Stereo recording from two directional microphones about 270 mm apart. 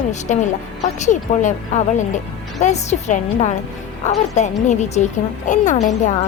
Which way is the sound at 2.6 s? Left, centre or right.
Left.